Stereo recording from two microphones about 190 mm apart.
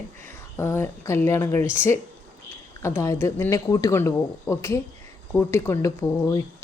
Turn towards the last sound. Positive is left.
turn(degrees=15)  # may be behind; listen again after turning